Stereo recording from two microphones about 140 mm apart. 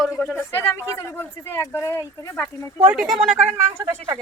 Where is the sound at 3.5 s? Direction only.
20° right (ahead or behind).